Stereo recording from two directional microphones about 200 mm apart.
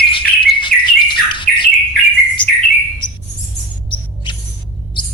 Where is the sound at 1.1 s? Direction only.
25° left (ahead or behind).